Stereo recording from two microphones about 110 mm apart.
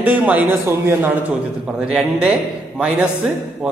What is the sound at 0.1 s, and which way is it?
A man's voice, 15° right (ahead or behind).